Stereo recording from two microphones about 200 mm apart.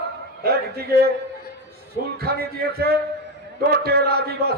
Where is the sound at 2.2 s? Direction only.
50° right (ahead or behind).